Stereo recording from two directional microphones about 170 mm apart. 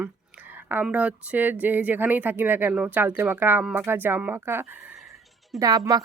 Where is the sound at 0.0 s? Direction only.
10° right (ahead or behind).